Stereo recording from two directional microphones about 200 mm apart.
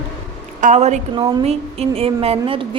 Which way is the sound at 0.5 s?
35° right (ahead or behind).